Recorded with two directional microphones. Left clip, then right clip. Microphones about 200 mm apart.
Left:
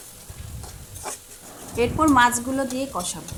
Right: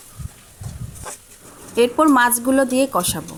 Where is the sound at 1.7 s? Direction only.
35° right (ahead or behind).